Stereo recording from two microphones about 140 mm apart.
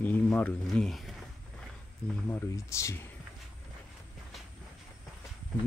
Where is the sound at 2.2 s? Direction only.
20° left (ahead or behind).